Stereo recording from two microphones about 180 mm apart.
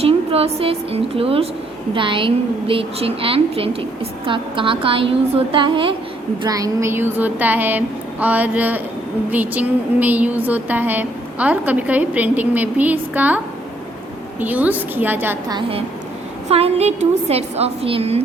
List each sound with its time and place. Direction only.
0.0 s a woman's voice: 30° right (ahead or behind); by 15.4 s 10° right (ahead or behind)
15.4 s a woman's voice: 25° right (ahead or behind)